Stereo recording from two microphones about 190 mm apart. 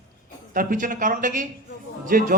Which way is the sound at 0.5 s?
45° right (ahead or behind).